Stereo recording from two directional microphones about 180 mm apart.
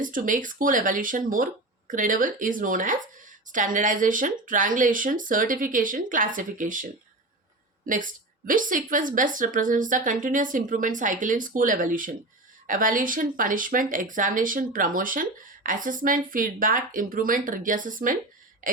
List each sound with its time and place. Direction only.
0.0 s speech: 50° right (ahead or behind)